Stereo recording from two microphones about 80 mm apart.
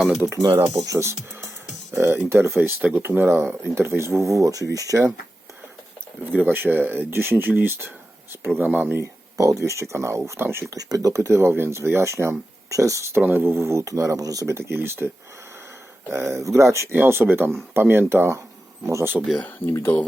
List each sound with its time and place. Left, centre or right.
0.5 s speech: right
6.4 s speech: right
9.4 s speech: right
10.8 s speech: right
19.4 s speech: left